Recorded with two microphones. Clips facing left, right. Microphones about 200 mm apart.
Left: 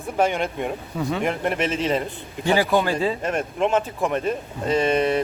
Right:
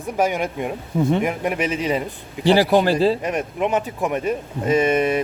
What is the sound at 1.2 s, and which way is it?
Speech, 10° right (ahead or behind).